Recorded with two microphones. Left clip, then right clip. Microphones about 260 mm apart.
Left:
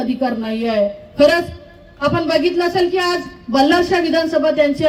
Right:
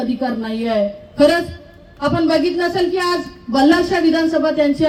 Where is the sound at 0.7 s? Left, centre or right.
Left.